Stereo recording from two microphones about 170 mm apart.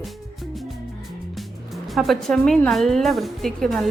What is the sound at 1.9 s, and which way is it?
A woman's voice, centre (ahead or behind).